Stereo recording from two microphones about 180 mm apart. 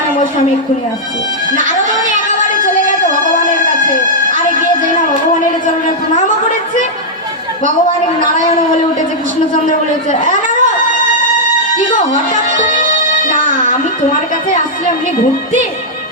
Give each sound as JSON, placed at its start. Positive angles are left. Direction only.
{"t": 1.5, "sound": "music", "side_deg": -45}
{"t": 9.6, "sound": "a man's voice", "side_deg": 45}
{"t": 11.9, "sound": "speech", "side_deg": 45}